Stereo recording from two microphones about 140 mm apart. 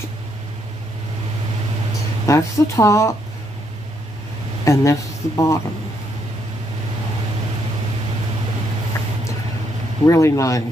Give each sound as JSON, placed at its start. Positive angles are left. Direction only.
{"t": 2.2, "sound": "speech", "side_deg": 20}
{"t": 4.6, "sound": "speech", "side_deg": 20}
{"t": 10.0, "sound": "speech", "side_deg": 20}